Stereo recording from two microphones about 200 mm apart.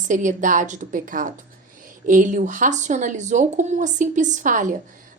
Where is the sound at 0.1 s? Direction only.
40° right (ahead or behind).